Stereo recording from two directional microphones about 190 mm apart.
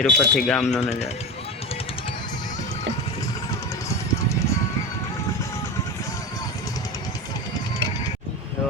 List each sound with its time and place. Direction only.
0.0 s speech: centre (ahead or behind)
0.8 s speech: 35° left (ahead or behind)